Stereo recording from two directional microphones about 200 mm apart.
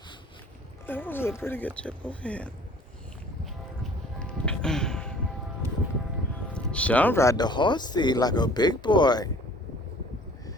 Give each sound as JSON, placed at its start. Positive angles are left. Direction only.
{"t": 0.9, "sound": "speech", "side_deg": 10}
{"t": 4.2, "sound": "music", "side_deg": 5}
{"t": 6.5, "sound": "speech", "side_deg": 5}